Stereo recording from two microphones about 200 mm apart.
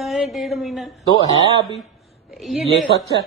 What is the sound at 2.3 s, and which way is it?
Speech, centre (ahead or behind).